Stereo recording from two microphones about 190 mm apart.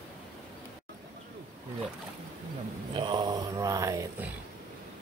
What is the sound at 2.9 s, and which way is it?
Mantra, 25° right (ahead or behind).